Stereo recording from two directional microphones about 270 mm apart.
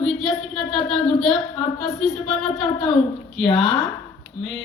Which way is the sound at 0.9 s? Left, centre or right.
Centre.